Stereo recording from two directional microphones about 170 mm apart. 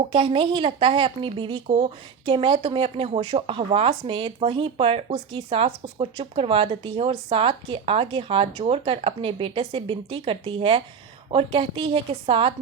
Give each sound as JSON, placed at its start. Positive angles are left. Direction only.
{"t": 0.1, "sound": "speech", "side_deg": -30}